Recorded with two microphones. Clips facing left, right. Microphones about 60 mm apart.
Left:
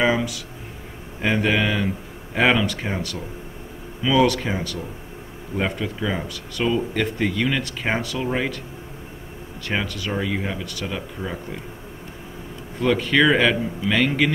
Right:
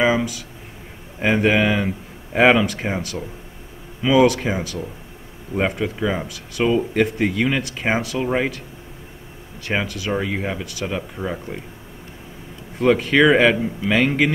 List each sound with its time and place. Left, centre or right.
0.0 s speech: centre
9.7 s speech: centre
13.0 s speech: centre